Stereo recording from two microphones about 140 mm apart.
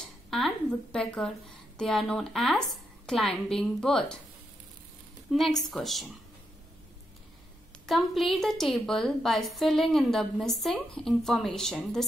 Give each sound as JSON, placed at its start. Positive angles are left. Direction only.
{"t": 0.9, "sound": "a woman's voice", "side_deg": 5}
{"t": 5.3, "sound": "a woman's voice", "side_deg": 0}
{"t": 7.8, "sound": "a woman's voice", "side_deg": 0}